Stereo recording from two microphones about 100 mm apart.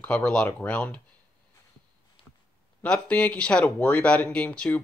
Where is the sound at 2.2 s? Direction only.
65° left (ahead or behind).